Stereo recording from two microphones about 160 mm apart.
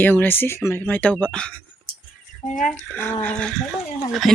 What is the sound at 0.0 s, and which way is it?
Speech, 10° left (ahead or behind).